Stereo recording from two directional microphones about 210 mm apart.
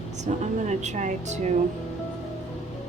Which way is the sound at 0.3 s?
35° right (ahead or behind).